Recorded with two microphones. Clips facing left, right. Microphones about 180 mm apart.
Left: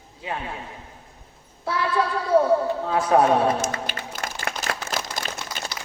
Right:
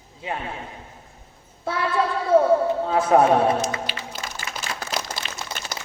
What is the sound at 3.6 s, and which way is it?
Music, 50° left (ahead or behind).